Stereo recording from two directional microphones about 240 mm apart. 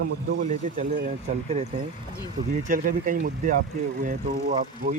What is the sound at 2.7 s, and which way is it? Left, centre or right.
Speech, right.